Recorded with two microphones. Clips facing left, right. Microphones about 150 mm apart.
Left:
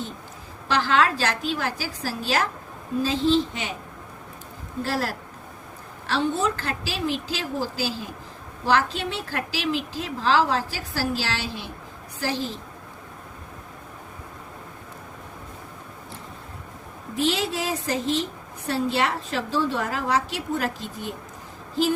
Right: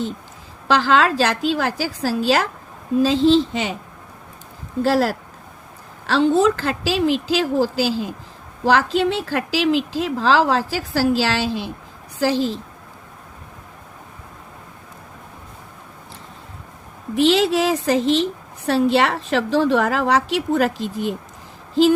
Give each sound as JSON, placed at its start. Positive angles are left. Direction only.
{"t": 0.7, "sound": "a woman's voice", "side_deg": -90}
{"t": 4.8, "sound": "a woman's voice", "side_deg": -90}
{"t": 17.2, "sound": "a woman's voice", "side_deg": -80}